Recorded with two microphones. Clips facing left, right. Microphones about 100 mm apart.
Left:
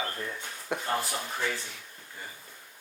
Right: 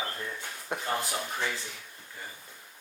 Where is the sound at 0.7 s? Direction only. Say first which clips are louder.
Left 2 dB; 25° right (ahead or behind).